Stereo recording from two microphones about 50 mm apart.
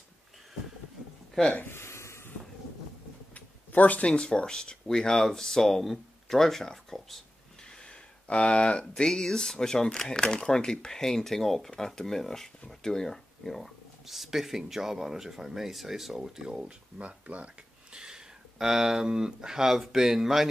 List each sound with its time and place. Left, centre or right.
1.4 s speech: centre
1.7 s a sound: left
3.3 s speech: left; by 7.2 s centre
7.8 s speech: left; by 17.5 s right
17.9 s speech: centre